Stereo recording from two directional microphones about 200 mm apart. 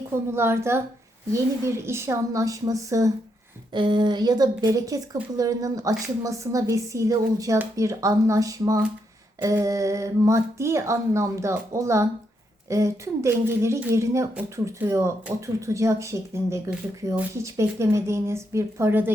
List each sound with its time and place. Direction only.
0.3 s speech: 10° right (ahead or behind)